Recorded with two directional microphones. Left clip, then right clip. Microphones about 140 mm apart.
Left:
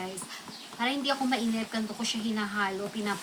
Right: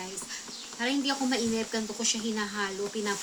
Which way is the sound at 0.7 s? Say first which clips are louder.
Left 1 dB; 20° left (ahead or behind).